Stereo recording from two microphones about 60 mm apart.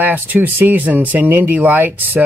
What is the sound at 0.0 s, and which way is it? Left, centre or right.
Speech, right.